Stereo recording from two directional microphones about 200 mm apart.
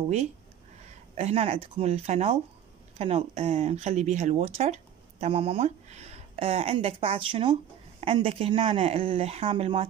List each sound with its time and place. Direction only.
1.1 s speech: 30° right (ahead or behind)